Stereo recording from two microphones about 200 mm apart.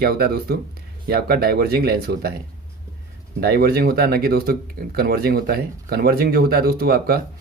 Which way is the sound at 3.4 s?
50° right (ahead or behind).